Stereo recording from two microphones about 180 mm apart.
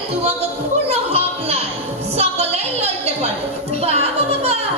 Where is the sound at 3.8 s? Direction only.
35° right (ahead or behind).